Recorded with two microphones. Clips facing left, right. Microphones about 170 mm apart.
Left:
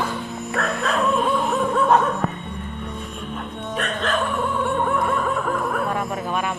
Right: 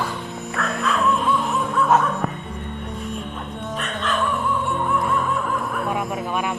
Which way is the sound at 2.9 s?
Centre (ahead or behind).